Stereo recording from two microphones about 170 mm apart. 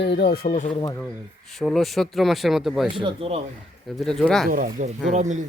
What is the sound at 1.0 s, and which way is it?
Speech, centre (ahead or behind).